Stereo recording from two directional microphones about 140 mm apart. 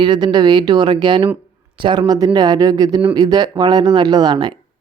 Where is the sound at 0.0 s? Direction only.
35° right (ahead or behind).